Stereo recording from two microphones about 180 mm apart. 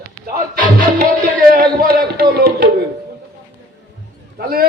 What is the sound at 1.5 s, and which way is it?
A man's voice, 55° right (ahead or behind).